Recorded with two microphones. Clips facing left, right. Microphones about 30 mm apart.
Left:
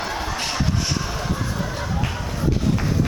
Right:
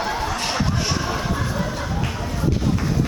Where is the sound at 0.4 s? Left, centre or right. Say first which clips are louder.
Right 1 dB; centre.